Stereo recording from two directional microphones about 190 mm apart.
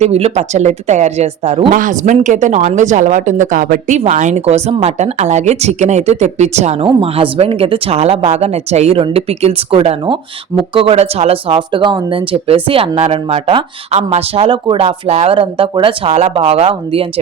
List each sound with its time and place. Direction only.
0.0 s a woman's voice: 35° right (ahead or behind)
1.7 s a woman's voice: 45° right (ahead or behind)